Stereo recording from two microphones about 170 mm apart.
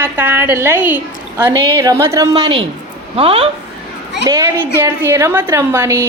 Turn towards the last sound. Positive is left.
turn(degrees=-15)  # may be behind; listen again after turning